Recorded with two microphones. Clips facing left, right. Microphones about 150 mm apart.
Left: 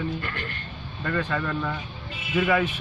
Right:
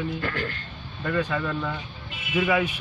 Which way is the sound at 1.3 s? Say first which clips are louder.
Even; 5° right (ahead or behind).